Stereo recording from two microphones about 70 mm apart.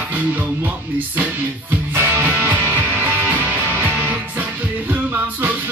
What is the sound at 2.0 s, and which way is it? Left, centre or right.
Music, right.